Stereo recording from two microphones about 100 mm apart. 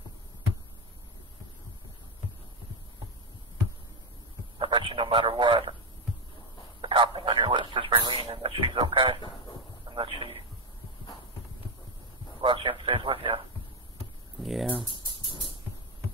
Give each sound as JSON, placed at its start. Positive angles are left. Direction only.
{"t": 4.6, "sound": "a man's voice", "side_deg": -55}
{"t": 6.8, "sound": "a sound", "side_deg": -55}
{"t": 9.9, "sound": "a man's voice", "side_deg": -60}
{"t": 12.4, "sound": "a man's voice", "side_deg": -60}
{"t": 14.4, "sound": "speech", "side_deg": 0}